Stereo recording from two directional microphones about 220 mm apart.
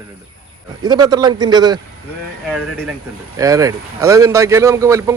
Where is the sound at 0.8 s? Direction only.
20° right (ahead or behind).